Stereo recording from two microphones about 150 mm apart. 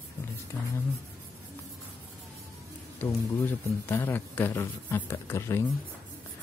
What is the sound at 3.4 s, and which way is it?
Speech, 15° left (ahead or behind).